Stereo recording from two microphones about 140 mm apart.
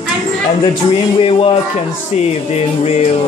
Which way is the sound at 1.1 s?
45° left (ahead or behind).